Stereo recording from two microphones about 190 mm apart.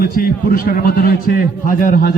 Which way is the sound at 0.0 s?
50° left (ahead or behind).